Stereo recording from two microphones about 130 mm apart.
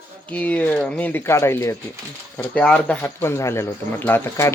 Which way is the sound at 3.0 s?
20° left (ahead or behind).